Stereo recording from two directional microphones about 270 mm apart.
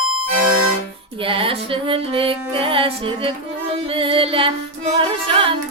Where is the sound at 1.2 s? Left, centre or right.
Centre.